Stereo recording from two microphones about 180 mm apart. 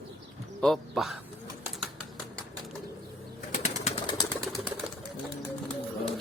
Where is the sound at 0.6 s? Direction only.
Centre (ahead or behind).